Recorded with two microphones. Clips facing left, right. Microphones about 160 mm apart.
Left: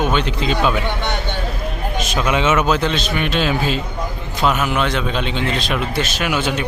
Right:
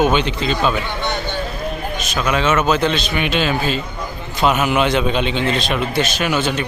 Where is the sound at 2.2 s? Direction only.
20° left (ahead or behind).